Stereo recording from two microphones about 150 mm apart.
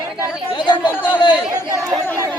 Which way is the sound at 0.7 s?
30° left (ahead or behind).